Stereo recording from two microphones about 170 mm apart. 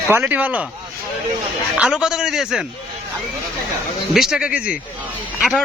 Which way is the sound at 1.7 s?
5° right (ahead or behind).